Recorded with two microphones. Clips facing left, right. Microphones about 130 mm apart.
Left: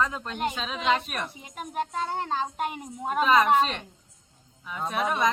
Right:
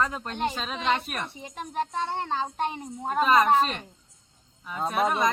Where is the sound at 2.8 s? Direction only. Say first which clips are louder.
Left 1 dB; 10° left (ahead or behind).